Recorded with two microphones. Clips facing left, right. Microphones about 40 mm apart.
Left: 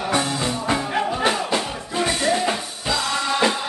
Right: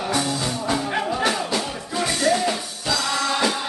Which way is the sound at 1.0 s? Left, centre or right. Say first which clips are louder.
Left 1 dB; centre.